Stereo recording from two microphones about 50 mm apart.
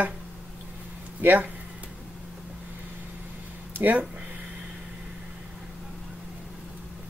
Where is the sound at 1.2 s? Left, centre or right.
Right.